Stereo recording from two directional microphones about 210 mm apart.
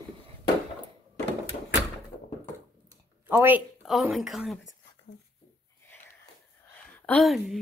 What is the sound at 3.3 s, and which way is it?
Speech, 10° right (ahead or behind).